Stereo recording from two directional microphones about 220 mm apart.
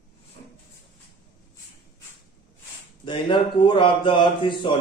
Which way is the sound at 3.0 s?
20° left (ahead or behind).